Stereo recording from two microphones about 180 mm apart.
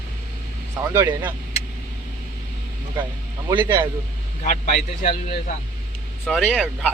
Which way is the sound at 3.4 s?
20° right (ahead or behind).